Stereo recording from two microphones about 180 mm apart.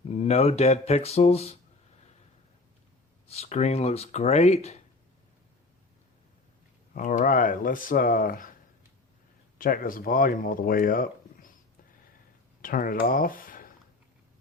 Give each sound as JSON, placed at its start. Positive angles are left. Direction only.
{"t": 0.1, "sound": "speech", "side_deg": 35}
{"t": 3.2, "sound": "speech", "side_deg": 35}
{"t": 6.9, "sound": "speech", "side_deg": 45}
{"t": 9.6, "sound": "speech", "side_deg": 50}
{"t": 12.6, "sound": "speech", "side_deg": 50}